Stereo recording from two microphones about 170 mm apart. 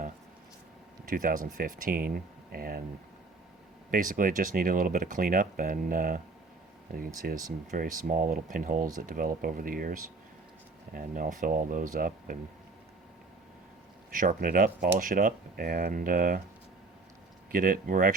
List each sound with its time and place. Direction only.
1.0 s speech: 55° right (ahead or behind)
3.9 s speech: 55° right (ahead or behind)
7.2 s speech: 65° right (ahead or behind)
7.7 s speech: 50° right (ahead or behind)
14.1 s speech: 50° right (ahead or behind)
17.5 s speech: 55° right (ahead or behind)